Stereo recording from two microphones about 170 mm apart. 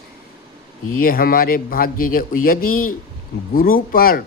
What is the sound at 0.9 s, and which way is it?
Speech, 55° left (ahead or behind).